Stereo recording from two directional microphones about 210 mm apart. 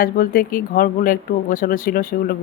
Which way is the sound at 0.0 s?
40° left (ahead or behind).